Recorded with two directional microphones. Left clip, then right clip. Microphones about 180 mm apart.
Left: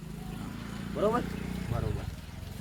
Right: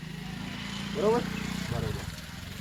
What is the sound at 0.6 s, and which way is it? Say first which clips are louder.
Vehicle: right 5 dB; 70° left (ahead or behind).